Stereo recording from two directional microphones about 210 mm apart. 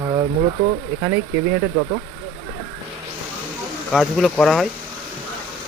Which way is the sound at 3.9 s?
Centre (ahead or behind).